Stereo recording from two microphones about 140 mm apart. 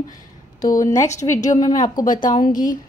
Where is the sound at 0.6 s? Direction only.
75° left (ahead or behind).